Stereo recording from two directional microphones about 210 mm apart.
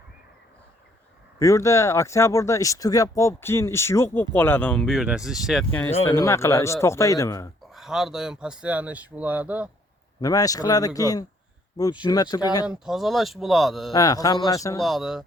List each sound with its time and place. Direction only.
1.4 s speech: 15° left (ahead or behind); by 5.6 s centre (ahead or behind)
6.1 s speech: 15° left (ahead or behind)
7.7 s speech: centre (ahead or behind)
10.2 s speech: 15° left (ahead or behind)
12.6 s speech: centre (ahead or behind)
13.9 s speech: 15° left (ahead or behind)
14.8 s speech: centre (ahead or behind)